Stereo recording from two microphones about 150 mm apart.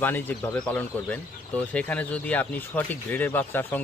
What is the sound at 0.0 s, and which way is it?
Speech, 10° left (ahead or behind).